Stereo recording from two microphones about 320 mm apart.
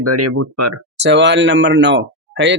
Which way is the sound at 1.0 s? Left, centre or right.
Right.